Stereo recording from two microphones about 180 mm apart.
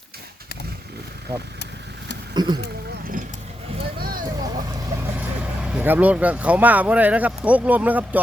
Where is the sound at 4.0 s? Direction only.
55° right (ahead or behind).